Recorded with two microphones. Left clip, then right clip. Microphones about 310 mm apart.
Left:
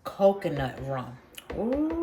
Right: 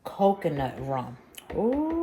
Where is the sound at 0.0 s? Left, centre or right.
Centre.